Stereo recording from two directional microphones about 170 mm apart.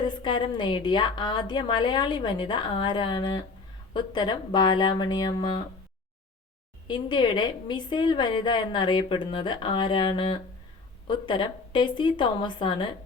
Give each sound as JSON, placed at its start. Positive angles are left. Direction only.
{"t": 0.1, "sound": "a woman's voice", "side_deg": 25}
{"t": 6.8, "sound": "a woman's voice", "side_deg": 25}